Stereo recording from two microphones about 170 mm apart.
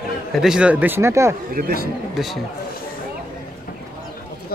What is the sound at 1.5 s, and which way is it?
Speech, 60° right (ahead or behind).